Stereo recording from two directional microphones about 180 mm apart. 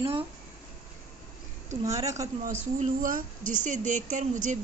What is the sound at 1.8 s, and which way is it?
Speech, 15° right (ahead or behind).